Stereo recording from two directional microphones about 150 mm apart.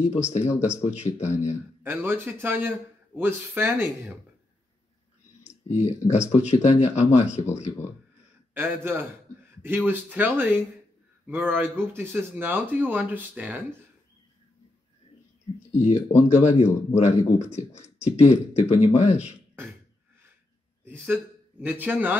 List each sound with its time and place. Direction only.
0.0 s speech: 45° left (ahead or behind)
1.8 s speech: 15° right (ahead or behind)
5.7 s speech: 45° left (ahead or behind)
8.5 s speech: 15° right (ahead or behind)
15.7 s speech: 45° left (ahead or behind)
19.6 s speech: 15° right (ahead or behind)
20.8 s a man's voice: 15° right (ahead or behind)